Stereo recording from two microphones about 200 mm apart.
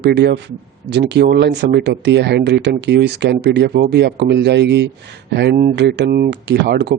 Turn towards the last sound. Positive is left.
turn(degrees=-55)  # may be behind; listen again after turning